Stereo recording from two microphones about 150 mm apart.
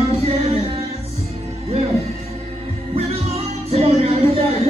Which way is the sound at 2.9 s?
40° right (ahead or behind).